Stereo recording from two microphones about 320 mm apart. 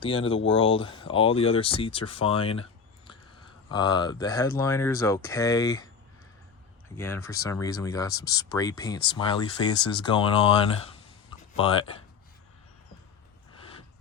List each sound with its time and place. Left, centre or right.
0.0 s speech: centre
3.7 s speech: centre
6.9 s speech: centre